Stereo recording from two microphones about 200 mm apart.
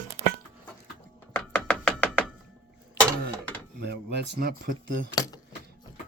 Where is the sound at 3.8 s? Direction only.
60° right (ahead or behind).